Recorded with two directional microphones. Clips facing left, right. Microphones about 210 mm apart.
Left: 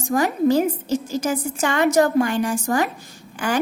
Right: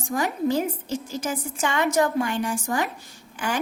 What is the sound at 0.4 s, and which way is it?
A woman's voice, 40° left (ahead or behind).